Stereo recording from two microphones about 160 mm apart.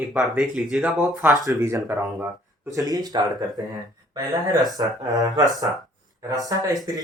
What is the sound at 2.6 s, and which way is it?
Speech, 20° right (ahead or behind).